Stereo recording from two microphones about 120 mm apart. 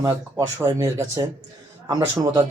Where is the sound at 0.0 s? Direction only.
25° right (ahead or behind).